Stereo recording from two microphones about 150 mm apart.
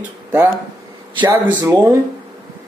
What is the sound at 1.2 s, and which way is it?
Speech, 25° right (ahead or behind).